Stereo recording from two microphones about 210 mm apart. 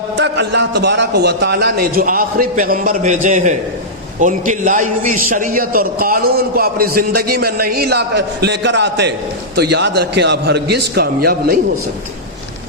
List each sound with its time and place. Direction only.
0.2 s a man's voice: 55° right (ahead or behind)